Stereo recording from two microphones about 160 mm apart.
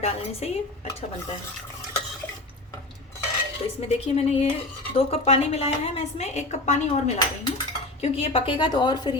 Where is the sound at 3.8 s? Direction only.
40° left (ahead or behind).